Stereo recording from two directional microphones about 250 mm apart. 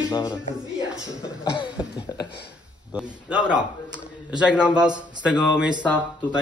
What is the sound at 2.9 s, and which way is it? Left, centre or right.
A man's voice, centre.